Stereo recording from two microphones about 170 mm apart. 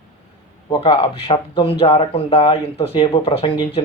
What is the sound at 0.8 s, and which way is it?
Speech, 30° left (ahead or behind).